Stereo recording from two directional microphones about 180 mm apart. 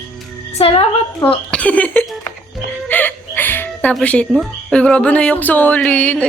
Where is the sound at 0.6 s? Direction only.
35° left (ahead or behind).